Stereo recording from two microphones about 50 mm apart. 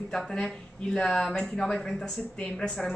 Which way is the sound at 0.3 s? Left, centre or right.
Centre.